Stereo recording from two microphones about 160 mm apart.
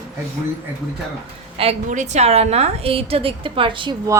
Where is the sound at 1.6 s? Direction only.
45° right (ahead or behind).